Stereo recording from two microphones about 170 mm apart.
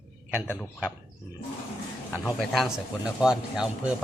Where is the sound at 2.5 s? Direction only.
Centre (ahead or behind).